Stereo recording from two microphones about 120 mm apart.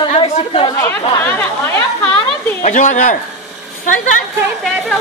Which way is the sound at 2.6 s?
90° left.